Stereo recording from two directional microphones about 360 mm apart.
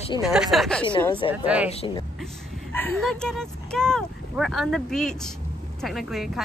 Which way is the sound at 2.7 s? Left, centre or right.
Centre.